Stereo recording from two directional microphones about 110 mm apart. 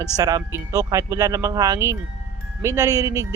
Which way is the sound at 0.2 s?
35° right (ahead or behind).